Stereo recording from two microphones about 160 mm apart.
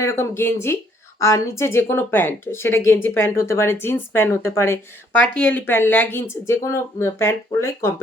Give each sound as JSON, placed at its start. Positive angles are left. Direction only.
{"t": 0.0, "sound": "speech", "side_deg": 15}